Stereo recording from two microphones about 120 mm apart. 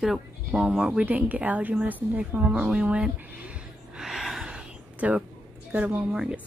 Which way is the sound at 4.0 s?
5° right (ahead or behind).